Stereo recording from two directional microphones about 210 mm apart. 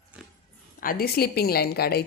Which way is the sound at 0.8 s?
45° left (ahead or behind).